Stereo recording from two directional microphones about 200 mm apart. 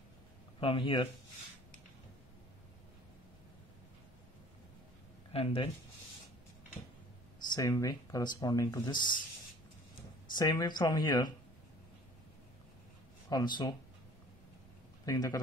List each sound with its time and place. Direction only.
0.6 s speech: 25° left (ahead or behind)
5.3 s speech: 30° left (ahead or behind)
7.5 s speech: 20° left (ahead or behind)
10.3 s speech: 20° left (ahead or behind)
13.3 s speech: 20° left (ahead or behind)
15.0 s a man's voice: 20° left (ahead or behind)